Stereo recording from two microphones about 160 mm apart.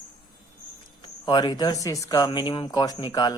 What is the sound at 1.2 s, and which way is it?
Speech, 25° left (ahead or behind).